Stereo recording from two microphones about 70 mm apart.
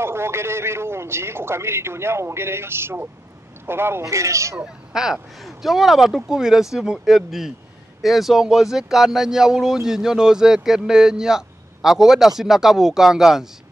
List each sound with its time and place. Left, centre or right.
0.0 s a man's voice: right
4.1 s speech: right
4.6 s speech: centre